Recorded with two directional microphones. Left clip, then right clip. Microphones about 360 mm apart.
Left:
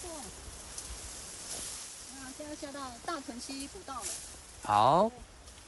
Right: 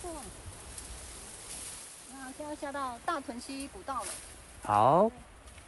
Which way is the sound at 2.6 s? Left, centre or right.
Centre.